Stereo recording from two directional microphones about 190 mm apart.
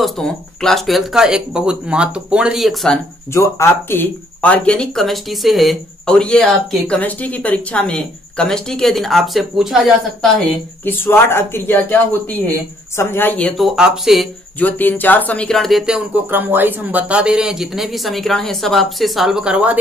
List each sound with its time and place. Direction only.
0.0 s speech: centre (ahead or behind)
3.3 s speech: 15° left (ahead or behind)
13.6 s speech: 5° right (ahead or behind)
14.6 s speech: 10° left (ahead or behind); by 19.8 s 5° right (ahead or behind)